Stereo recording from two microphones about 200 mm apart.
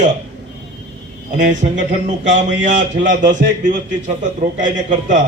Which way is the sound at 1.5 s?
35° right (ahead or behind).